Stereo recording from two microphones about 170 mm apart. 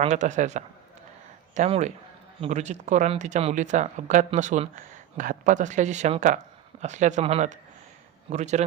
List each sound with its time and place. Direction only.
0.0 s speech: 45° right (ahead or behind)